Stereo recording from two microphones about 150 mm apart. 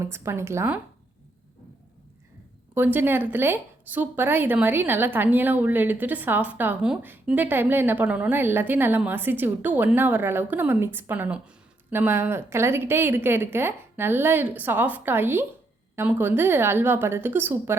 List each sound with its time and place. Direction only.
0.0 s a woman's voice: 20° right (ahead or behind)
2.7 s a woman's voice: 15° right (ahead or behind)